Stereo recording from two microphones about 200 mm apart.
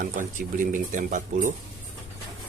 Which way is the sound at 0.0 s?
40° right (ahead or behind).